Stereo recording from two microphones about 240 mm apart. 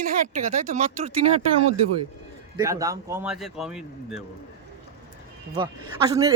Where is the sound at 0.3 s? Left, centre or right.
Right.